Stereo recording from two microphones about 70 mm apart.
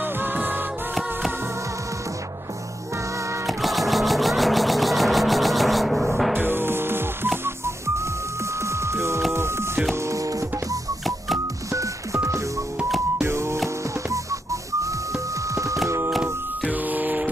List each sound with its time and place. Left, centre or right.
0.0 s music: right
3.4 s music: centre
6.3 s music: right
7.4 s whistling: right
8.5 s music: right
14.1 s whistling: right
15.5 s a sound: right
16.6 s a sound: right